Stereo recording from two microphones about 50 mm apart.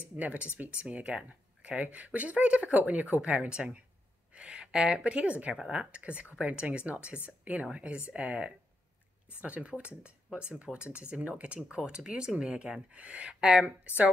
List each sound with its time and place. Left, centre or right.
0.1 s speech: right